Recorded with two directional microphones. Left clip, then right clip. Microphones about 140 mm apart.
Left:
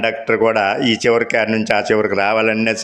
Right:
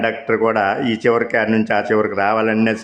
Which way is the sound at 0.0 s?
15° left (ahead or behind).